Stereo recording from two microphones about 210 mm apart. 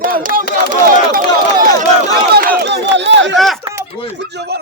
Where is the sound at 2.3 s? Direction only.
50° right (ahead or behind).